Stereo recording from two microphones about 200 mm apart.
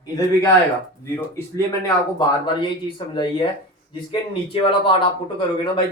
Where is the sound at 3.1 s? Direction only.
25° left (ahead or behind).